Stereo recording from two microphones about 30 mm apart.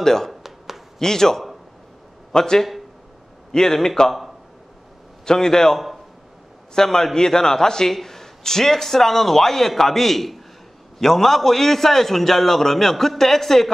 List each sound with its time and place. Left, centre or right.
0.0 s a man's voice: centre
0.3 s a sound: centre
0.9 s a man's voice: centre
5.2 s a man's voice: centre